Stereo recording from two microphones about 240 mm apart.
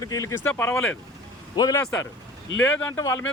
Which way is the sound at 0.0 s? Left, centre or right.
Centre.